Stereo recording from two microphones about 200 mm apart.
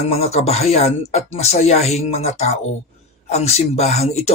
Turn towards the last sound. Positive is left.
turn(degrees=30)  # may be behind; listen again after turning